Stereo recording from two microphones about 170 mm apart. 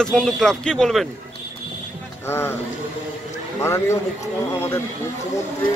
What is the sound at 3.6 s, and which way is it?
Speech, 15° left (ahead or behind).